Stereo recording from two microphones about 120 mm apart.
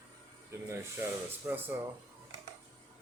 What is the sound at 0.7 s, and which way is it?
Speech, 20° right (ahead or behind).